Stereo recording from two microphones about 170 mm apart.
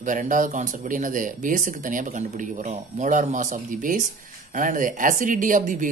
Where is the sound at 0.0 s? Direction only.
50° right (ahead or behind).